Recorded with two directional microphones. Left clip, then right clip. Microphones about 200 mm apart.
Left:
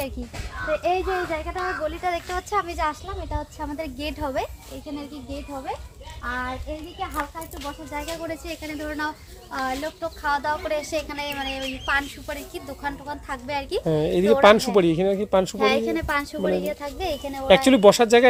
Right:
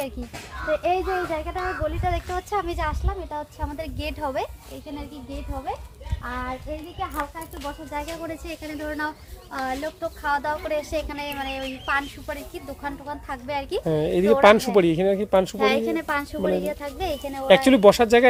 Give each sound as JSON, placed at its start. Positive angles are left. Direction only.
{"t": 1.3, "sound": "a woman's voice", "side_deg": -5}
{"t": 2.5, "sound": "a woman's voice", "side_deg": -15}
{"t": 6.2, "sound": "a woman's voice", "side_deg": -10}